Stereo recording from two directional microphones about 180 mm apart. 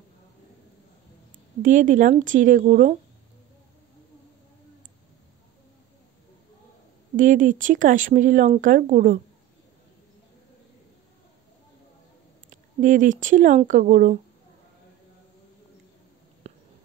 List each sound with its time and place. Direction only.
1.6 s speech: 45° right (ahead or behind)
7.2 s speech: 45° right (ahead or behind)
12.4 s speech: 45° right (ahead or behind)
16.5 s a sound: 35° right (ahead or behind)